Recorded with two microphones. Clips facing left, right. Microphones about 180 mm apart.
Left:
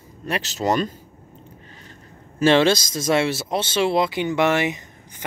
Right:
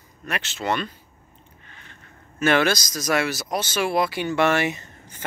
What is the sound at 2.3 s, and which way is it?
Speech, 25° left (ahead or behind).